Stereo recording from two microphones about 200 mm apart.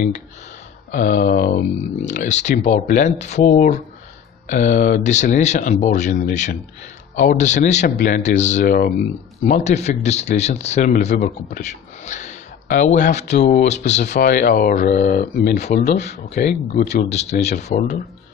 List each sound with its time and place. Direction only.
0.9 s speech: 45° left (ahead or behind)
9.5 s speech: 35° left (ahead or behind)
14.0 s speech: 55° left (ahead or behind)
14.3 s speech: 45° left (ahead or behind)
17.6 s speech: 45° left (ahead or behind)